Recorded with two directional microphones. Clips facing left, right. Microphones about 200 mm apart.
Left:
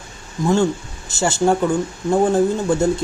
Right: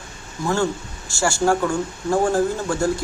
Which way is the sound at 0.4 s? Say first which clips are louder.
Left 4 dB; 20° left (ahead or behind).